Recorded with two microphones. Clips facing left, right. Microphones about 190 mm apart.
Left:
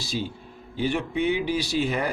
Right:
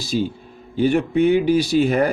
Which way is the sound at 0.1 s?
50° right (ahead or behind).